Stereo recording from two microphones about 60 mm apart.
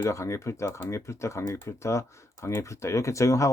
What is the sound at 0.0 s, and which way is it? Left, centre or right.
Speech, left.